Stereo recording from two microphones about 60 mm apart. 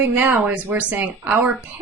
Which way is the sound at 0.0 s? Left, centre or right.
Right.